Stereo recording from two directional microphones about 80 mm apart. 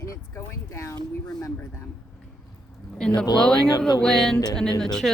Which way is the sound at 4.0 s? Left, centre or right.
Centre.